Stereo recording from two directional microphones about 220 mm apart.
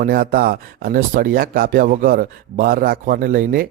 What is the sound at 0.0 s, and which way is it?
Speech, 40° right (ahead or behind).